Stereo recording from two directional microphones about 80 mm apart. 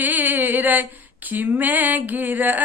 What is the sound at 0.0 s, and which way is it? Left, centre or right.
Female singing, right.